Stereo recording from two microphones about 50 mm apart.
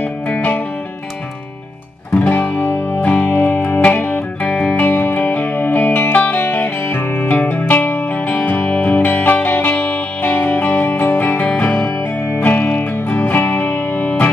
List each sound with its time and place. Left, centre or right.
2.3 s music: left
3.0 s music: left
4.7 s music: left